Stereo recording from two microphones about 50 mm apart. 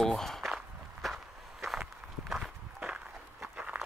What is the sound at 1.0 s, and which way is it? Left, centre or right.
Walk, centre.